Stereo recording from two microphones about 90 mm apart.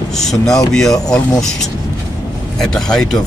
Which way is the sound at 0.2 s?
5° left (ahead or behind).